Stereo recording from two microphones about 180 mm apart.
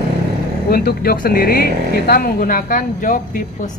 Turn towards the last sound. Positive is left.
turn(degrees=45)  # may be behind; listen again after turning